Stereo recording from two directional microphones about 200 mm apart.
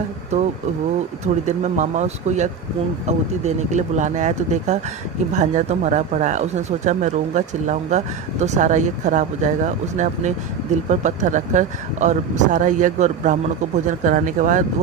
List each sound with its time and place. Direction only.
0.3 s speech: 35° right (ahead or behind)